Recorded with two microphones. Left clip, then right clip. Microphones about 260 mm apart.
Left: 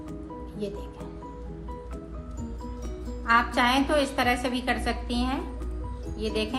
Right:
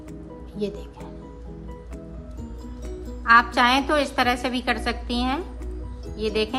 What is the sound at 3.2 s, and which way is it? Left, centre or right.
A woman's voice, centre.